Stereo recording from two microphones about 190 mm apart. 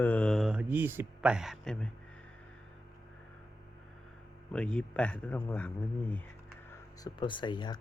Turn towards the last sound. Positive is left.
turn(degrees=25)  # may be behind; listen again after turning